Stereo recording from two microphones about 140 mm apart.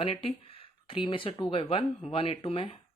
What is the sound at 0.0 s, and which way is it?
Speech, 40° left (ahead or behind).